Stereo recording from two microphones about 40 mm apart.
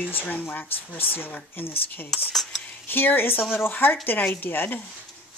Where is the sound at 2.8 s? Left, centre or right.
Left.